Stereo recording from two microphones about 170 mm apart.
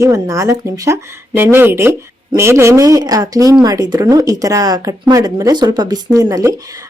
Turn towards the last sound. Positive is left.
turn(degrees=-20)  # may be behind; listen again after turning